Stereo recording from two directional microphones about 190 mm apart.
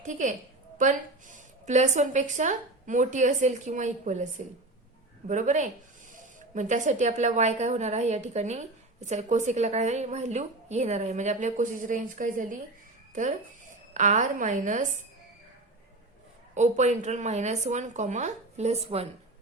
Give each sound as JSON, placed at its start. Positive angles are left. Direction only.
{"t": 0.0, "sound": "a woman's voice", "side_deg": -40}
{"t": 5.3, "sound": "a woman's voice", "side_deg": -40}
{"t": 16.6, "sound": "a woman's voice", "side_deg": -40}